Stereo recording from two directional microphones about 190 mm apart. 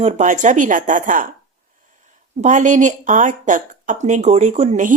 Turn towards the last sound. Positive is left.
turn(degrees=-40)  # may be behind; listen again after turning